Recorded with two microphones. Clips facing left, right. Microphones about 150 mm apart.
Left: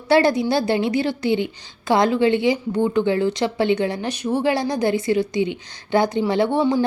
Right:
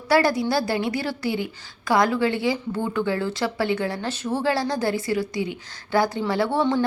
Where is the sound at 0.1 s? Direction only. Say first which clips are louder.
Left 3 dB; 25° left (ahead or behind).